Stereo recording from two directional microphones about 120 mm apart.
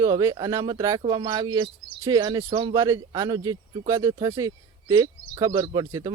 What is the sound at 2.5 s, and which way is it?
Speech, 50° right (ahead or behind).